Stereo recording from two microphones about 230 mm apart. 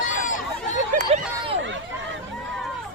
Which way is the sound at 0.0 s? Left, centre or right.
Left.